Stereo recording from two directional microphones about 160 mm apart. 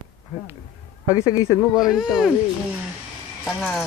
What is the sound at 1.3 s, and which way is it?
Speech, 20° left (ahead or behind).